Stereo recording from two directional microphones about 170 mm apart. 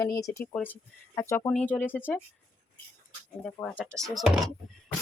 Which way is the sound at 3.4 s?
10° left (ahead or behind).